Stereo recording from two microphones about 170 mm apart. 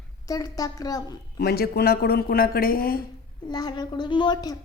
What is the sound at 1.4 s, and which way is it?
A woman's voice, 65° left (ahead or behind).